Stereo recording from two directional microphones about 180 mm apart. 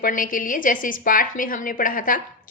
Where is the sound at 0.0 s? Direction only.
50° left (ahead or behind).